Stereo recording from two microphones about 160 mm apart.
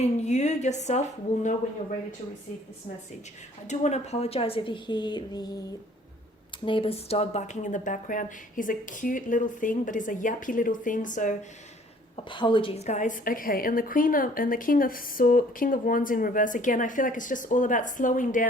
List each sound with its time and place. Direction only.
0.0 s speech: 45° left (ahead or behind)
3.7 s a woman's voice: 45° left (ahead or behind); by 5.5 s 25° left (ahead or behind)
6.7 s speech: 35° left (ahead or behind); by 11.3 s 55° left (ahead or behind)
12.1 s a woman's voice: 30° left (ahead or behind); by 18.4 s 55° left (ahead or behind)